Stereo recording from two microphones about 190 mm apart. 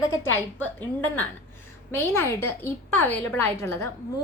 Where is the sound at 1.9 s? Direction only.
15° left (ahead or behind).